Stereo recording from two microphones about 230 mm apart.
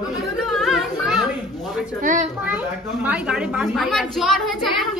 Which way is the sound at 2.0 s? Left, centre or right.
Right.